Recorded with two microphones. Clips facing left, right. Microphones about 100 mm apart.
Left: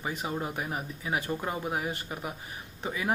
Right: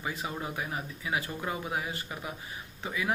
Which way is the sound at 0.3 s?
30° left (ahead or behind).